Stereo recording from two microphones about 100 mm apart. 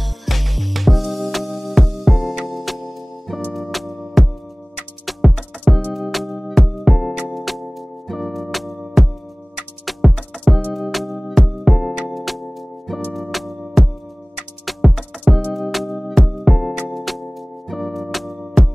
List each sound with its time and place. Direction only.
0.0 s music: centre (ahead or behind)